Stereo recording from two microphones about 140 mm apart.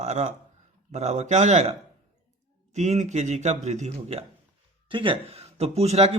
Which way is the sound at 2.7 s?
55° right (ahead or behind).